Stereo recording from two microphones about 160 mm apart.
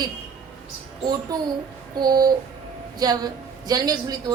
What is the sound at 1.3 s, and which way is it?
Speech, 20° right (ahead or behind).